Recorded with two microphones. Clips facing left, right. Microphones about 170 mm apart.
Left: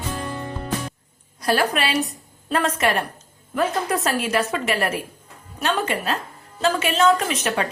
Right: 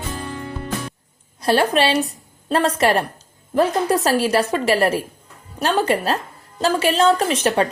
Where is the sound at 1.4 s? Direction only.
30° right (ahead or behind).